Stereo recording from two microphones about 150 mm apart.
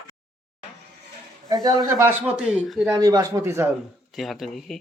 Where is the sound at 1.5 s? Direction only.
20° right (ahead or behind).